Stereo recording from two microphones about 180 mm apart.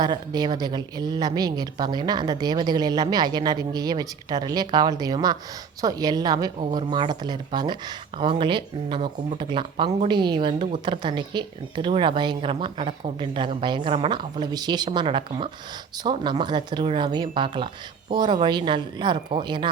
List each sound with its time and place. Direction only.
0.0 s a woman's voice: 25° right (ahead or behind)